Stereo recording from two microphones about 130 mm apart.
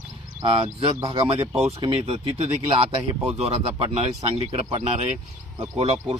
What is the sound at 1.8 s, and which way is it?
Speech, 50° right (ahead or behind).